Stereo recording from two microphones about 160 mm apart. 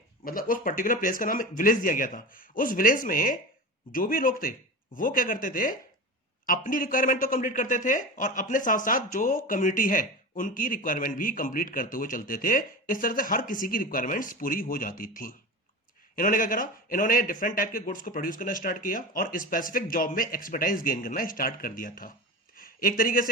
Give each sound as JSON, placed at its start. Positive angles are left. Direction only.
{"t": 0.3, "sound": "speech", "side_deg": 60}